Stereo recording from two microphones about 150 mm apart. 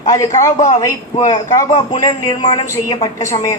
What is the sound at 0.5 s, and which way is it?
Speech, 50° left (ahead or behind).